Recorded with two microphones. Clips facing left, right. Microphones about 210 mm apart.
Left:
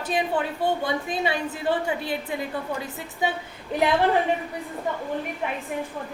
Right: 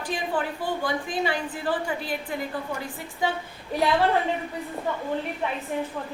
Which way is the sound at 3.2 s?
20° left (ahead or behind).